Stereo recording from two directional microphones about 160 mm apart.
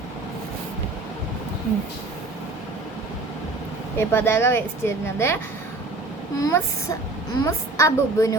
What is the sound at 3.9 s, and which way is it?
Speech, 15° left (ahead or behind).